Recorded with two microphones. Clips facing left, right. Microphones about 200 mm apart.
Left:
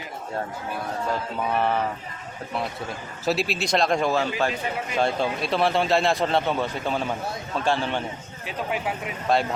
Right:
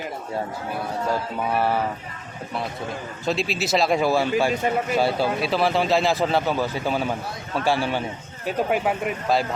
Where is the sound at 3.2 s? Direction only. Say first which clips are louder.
Even; 5° left (ahead or behind).